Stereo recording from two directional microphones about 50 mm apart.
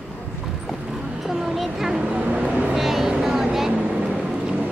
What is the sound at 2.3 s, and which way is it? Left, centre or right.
Vehicle, right.